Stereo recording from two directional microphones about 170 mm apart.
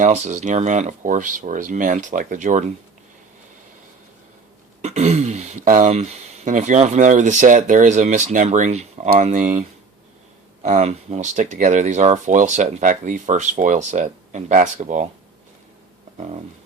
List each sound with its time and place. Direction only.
0.0 s speech: 45° right (ahead or behind)
4.8 s speech: 40° right (ahead or behind)
16.1 s a sound: 45° right (ahead or behind)